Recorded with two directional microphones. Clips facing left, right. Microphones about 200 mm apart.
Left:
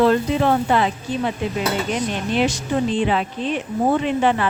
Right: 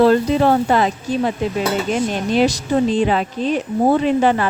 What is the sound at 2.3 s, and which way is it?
Speech, 40° right (ahead or behind).